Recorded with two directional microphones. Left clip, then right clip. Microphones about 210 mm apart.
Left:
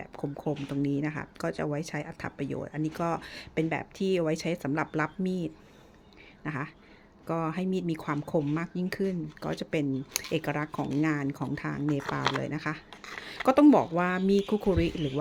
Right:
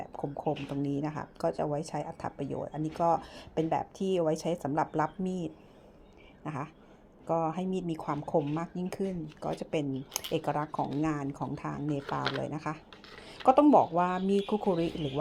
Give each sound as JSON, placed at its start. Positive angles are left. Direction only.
{"t": 0.0, "sound": "speech", "side_deg": 30}